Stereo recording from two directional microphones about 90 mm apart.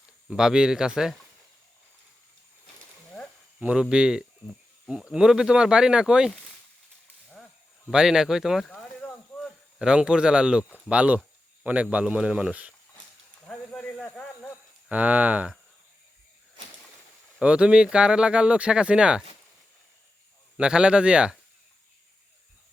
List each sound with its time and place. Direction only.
0.3 s speech: 5° right (ahead or behind)
3.6 s speech: 10° right (ahead or behind)
7.9 s speech: 5° right (ahead or behind)
13.5 s a sound: 5° left (ahead or behind)
14.8 s speech: 15° right (ahead or behind)
17.4 s speech: 10° right (ahead or behind)
20.6 s speech: 10° right (ahead or behind)